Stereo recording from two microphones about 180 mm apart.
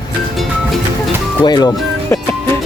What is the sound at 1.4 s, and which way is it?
Speech, 25° left (ahead or behind).